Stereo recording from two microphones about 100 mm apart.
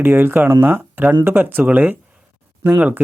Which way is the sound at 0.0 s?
20° right (ahead or behind).